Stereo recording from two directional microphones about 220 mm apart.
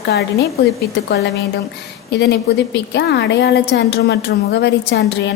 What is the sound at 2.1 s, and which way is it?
A woman's voice, 50° left (ahead or behind).